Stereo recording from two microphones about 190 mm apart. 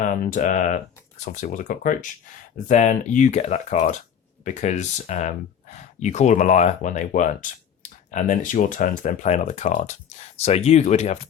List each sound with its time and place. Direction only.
0.0 s speech: 45° left (ahead or behind)